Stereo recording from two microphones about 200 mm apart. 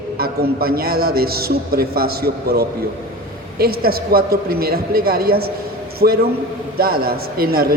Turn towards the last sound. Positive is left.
turn(degrees=-50)  # may be behind; listen again after turning